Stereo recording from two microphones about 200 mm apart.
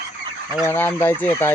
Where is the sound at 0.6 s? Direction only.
10° left (ahead or behind).